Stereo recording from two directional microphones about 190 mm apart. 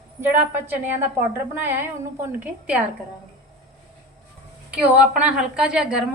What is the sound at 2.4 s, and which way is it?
Speech, 10° right (ahead or behind).